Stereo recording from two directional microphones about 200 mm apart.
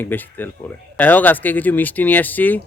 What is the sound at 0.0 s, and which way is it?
A man's voice, 10° left (ahead or behind).